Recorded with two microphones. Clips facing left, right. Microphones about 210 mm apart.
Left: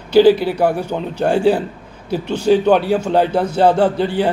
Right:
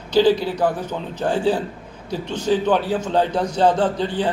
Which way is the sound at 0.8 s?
10° left (ahead or behind).